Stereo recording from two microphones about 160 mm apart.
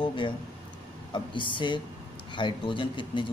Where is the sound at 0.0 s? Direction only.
30° left (ahead or behind).